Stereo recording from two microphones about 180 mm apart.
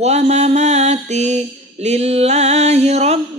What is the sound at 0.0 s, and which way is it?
Mantra, 35° right (ahead or behind).